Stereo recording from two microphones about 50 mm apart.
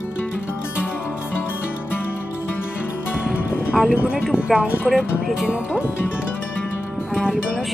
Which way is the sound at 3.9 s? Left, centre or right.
Right.